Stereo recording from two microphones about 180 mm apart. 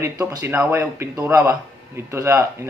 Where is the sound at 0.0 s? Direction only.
15° right (ahead or behind).